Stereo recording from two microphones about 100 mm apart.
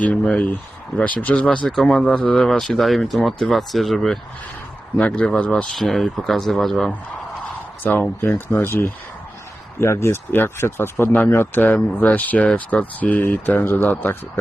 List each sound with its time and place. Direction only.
0.0 s speech: 15° left (ahead or behind)
4.9 s speech: 15° left (ahead or behind)
5.7 s speech: centre (ahead or behind)
8.5 s speech: 25° left (ahead or behind)